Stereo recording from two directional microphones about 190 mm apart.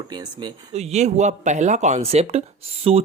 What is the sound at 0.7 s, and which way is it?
Speech, 35° right (ahead or behind).